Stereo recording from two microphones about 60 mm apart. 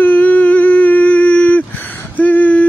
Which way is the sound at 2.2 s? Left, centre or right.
Left.